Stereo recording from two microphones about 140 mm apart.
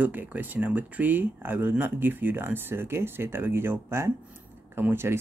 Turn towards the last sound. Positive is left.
turn(degrees=-15)  # may be behind; listen again after turning